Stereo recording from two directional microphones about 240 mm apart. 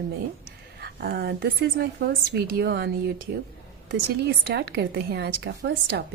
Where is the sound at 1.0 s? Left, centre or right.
Right.